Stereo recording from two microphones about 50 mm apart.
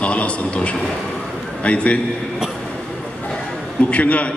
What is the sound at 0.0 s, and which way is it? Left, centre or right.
A man's voice, left.